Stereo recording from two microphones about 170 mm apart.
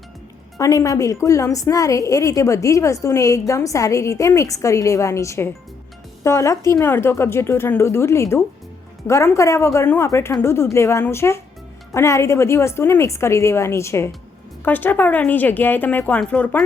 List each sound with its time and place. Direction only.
0.6 s a woman's voice: 20° left (ahead or behind)